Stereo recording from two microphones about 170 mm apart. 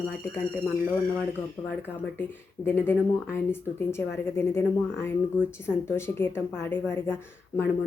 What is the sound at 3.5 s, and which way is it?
A woman's voice, 10° left (ahead or behind).